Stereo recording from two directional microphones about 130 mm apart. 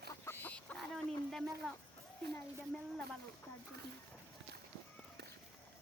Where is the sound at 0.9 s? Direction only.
Centre (ahead or behind).